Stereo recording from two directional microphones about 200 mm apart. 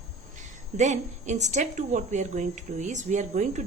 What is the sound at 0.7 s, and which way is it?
A woman's voice, 35° right (ahead or behind).